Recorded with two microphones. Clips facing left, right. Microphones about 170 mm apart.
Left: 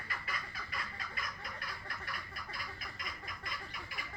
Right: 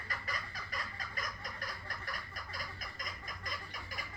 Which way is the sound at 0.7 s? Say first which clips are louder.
Right 1 dB; 40° right (ahead or behind).